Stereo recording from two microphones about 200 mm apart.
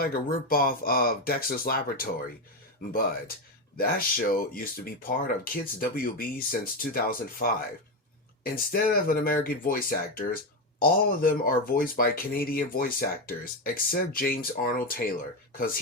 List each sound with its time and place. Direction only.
0.0 s speech: 45° left (ahead or behind)
3.8 s speech: 50° left (ahead or behind)
8.5 s speech: 45° left (ahead or behind)